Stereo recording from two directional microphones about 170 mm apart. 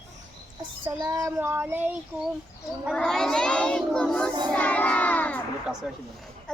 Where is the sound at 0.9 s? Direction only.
20° right (ahead or behind).